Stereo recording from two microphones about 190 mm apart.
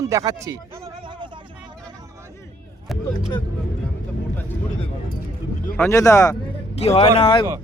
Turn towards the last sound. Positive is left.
turn(degrees=25)  # may be behind; listen again after turning